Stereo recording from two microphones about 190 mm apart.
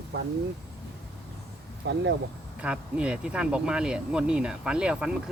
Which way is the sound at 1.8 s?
65° right (ahead or behind).